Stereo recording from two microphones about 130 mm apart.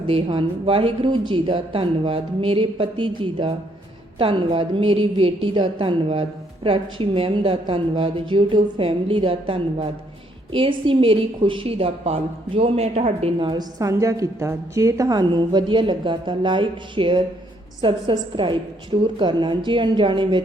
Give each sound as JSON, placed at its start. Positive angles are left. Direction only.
{"t": 0.1, "sound": "a woman's voice", "side_deg": -45}
{"t": 13.4, "sound": "a woman's voice", "side_deg": -35}